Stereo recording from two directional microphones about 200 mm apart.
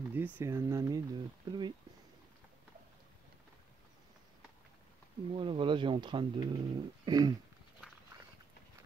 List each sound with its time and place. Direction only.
0.1 s speech: 10° right (ahead or behind)
5.3 s speech: 25° right (ahead or behind)